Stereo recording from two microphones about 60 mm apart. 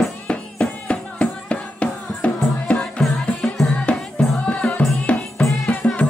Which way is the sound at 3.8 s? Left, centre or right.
Centre.